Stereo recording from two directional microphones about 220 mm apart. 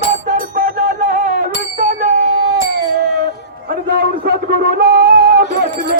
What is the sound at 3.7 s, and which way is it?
Music, 40° right (ahead or behind).